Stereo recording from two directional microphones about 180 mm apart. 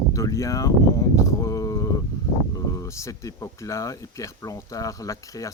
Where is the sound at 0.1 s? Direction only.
15° left (ahead or behind).